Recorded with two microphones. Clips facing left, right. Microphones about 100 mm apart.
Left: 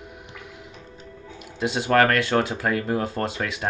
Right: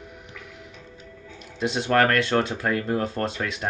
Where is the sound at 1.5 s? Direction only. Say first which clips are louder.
Left 1 dB; 5° left (ahead or behind).